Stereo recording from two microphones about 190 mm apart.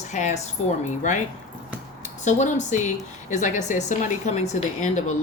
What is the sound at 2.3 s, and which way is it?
A woman's voice, 40° left (ahead or behind).